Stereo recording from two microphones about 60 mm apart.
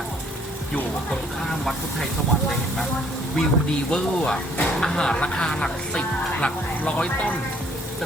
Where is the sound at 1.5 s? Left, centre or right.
Centre.